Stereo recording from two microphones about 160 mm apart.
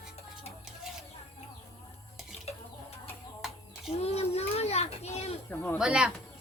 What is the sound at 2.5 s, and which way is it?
Chicken, 40° left (ahead or behind).